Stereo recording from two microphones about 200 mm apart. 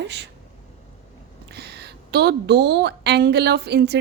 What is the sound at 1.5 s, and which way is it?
A woman's voice, 55° right (ahead or behind).